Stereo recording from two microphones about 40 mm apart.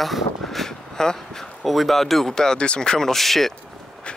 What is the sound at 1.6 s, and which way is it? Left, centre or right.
Speech, centre.